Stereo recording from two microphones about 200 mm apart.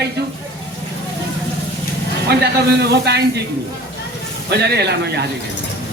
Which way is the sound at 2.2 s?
55° right (ahead or behind).